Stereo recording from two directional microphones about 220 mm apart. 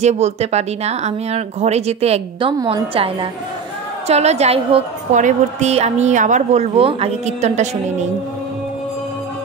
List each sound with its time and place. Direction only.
0.0 s a woman's voice: 30° right (ahead or behind)